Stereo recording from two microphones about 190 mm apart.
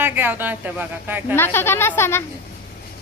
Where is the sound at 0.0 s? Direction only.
10° right (ahead or behind).